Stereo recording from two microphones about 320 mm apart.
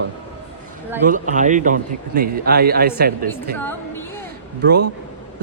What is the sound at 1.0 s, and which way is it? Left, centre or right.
Speech, right.